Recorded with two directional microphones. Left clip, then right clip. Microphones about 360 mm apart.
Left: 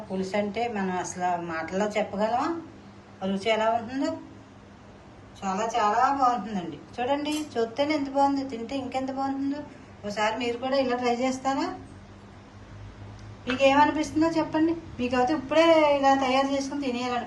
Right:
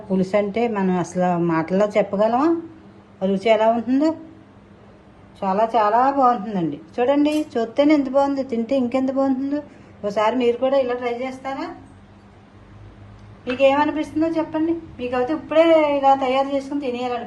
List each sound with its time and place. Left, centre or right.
0.2 s a woman's voice: centre
5.4 s a woman's voice: centre
13.4 s a woman's voice: centre